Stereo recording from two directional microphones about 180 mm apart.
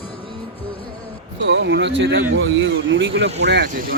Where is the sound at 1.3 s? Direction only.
85° right.